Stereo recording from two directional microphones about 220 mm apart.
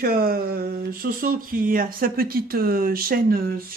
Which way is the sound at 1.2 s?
40° right (ahead or behind).